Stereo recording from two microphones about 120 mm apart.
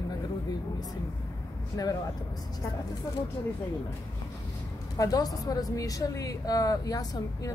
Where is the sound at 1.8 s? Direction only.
30° left (ahead or behind).